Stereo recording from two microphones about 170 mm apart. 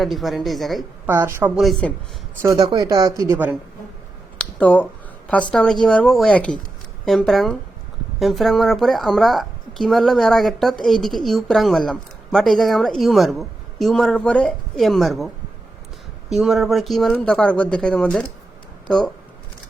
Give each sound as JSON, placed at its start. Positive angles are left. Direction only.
{"t": 0.0, "sound": "a woman's voice", "side_deg": 0}
{"t": 1.0, "sound": "speech", "side_deg": -15}
{"t": 1.5, "sound": "a woman's voice", "side_deg": 0}
{"t": 2.6, "sound": "speech", "side_deg": -25}
{"t": 3.3, "sound": "speech", "side_deg": -10}
{"t": 4.4, "sound": "a sound", "side_deg": 10}
{"t": 5.3, "sound": "a woman's voice", "side_deg": 5}
{"t": 16.3, "sound": "a woman's voice", "side_deg": 0}